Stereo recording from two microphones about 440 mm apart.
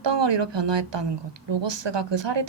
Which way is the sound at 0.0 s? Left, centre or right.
Right.